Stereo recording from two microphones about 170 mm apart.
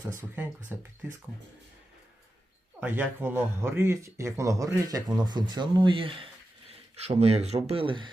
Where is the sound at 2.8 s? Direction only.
10° right (ahead or behind).